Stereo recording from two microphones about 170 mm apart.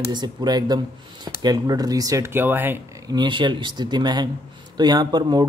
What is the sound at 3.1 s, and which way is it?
Speech, 25° right (ahead or behind).